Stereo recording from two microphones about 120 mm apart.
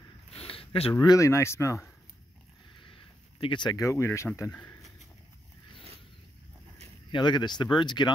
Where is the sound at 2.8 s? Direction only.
45° left (ahead or behind); by 4.5 s 25° left (ahead or behind).